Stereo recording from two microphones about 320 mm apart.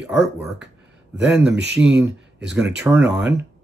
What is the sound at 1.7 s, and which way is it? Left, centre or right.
Speech, centre.